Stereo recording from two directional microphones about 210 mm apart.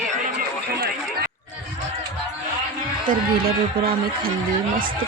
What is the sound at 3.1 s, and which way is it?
A man's voice, 45° right (ahead or behind).